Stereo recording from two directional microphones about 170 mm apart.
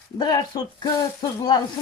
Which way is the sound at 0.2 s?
25° left (ahead or behind).